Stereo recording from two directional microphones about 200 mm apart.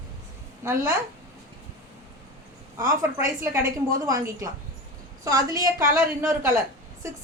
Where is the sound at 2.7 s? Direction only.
15° right (ahead or behind).